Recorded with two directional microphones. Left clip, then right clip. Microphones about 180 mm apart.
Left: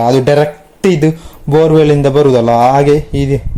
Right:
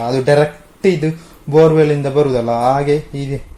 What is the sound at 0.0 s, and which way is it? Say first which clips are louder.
Speech: left 4 dB; 45° left (ahead or behind).